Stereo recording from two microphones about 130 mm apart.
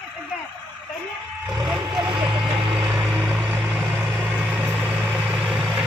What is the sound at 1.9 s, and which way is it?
Vehicle, 35° right (ahead or behind).